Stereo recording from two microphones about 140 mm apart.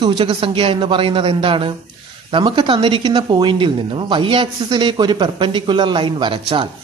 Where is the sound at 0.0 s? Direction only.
35° right (ahead or behind).